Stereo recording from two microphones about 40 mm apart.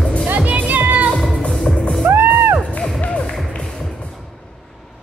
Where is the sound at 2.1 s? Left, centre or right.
Right.